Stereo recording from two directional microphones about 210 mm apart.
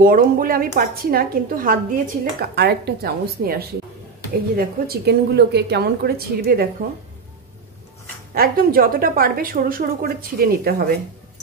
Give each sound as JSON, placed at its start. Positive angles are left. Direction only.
{"t": 0.0, "sound": "a woman's voice", "side_deg": -45}
{"t": 8.4, "sound": "a woman's voice", "side_deg": -45}